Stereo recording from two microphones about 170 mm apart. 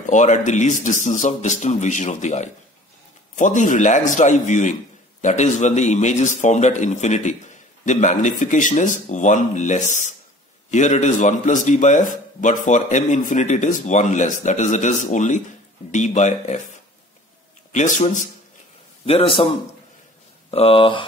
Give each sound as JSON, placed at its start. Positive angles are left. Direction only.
{"t": 0.0, "sound": "a man's voice", "side_deg": 45}
{"t": 17.7, "sound": "a man's voice", "side_deg": 50}
{"t": 19.0, "sound": "speech", "side_deg": 35}
{"t": 20.5, "sound": "speech", "side_deg": 35}